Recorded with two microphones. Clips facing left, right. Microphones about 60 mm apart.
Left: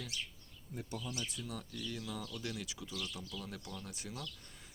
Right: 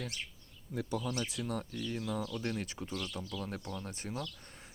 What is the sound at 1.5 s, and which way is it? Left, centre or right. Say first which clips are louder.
Speech: right 6 dB; right.